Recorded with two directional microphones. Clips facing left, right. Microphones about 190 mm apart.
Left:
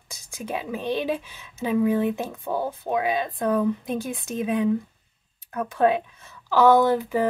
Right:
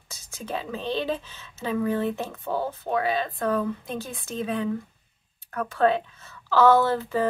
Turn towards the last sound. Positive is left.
turn(degrees=15)  # may be behind; listen again after turning